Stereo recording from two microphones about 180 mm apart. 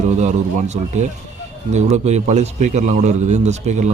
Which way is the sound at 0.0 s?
40° right (ahead or behind).